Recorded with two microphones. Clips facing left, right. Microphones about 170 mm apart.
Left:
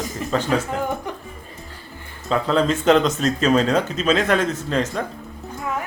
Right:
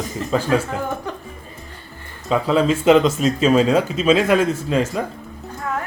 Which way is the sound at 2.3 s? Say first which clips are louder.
Right 2 dB; 5° right (ahead or behind).